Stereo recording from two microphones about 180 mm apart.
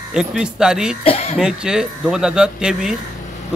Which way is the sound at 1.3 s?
5° right (ahead or behind).